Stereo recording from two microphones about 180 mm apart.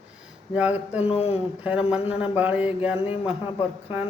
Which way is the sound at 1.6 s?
5° right (ahead or behind).